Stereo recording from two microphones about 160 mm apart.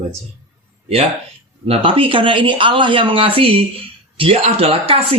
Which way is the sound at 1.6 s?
35° right (ahead or behind).